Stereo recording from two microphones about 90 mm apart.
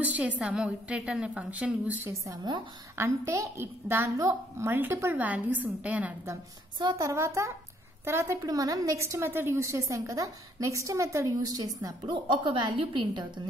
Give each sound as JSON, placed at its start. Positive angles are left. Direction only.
{"t": 0.0, "sound": "a woman's voice", "side_deg": -15}
{"t": 3.0, "sound": "a child's voice", "side_deg": -30}
{"t": 4.2, "sound": "a woman's voice", "side_deg": -40}
{"t": 4.6, "sound": "a child's voice", "side_deg": -25}
{"t": 7.0, "sound": "a woman's voice", "side_deg": -35}
{"t": 8.5, "sound": "a woman's voice", "side_deg": -40}
{"t": 12.1, "sound": "a woman's voice", "side_deg": -65}